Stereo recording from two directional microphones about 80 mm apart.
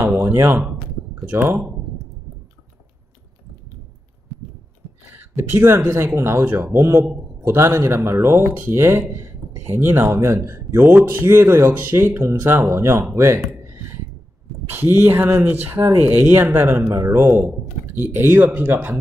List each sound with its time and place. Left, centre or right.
0.0 s a sound: right
1.2 s speech: right
5.1 s a sound: right
5.9 s speech: right
14.7 s speech: right
16.9 s speech: right